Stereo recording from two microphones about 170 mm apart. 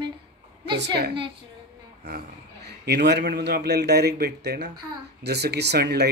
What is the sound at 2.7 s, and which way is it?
A man's voice, 75° right (ahead or behind).